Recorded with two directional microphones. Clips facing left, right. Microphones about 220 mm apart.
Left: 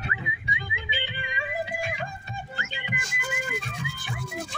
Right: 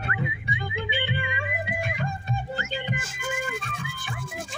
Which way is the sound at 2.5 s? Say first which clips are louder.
Right 6 dB; 40° right (ahead or behind).